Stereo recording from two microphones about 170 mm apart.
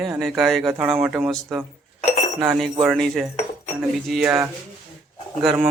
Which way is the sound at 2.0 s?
40° left (ahead or behind).